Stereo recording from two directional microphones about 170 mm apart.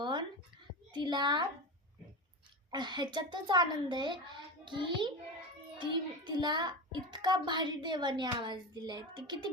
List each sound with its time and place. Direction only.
0.0 s a sound: 25° right (ahead or behind)
0.9 s a child's voice: 25° right (ahead or behind)
2.6 s a child's voice: 25° right (ahead or behind)